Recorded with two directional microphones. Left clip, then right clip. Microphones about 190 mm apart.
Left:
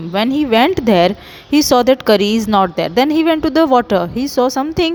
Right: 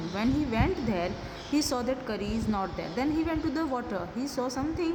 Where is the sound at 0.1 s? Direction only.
55° left (ahead or behind).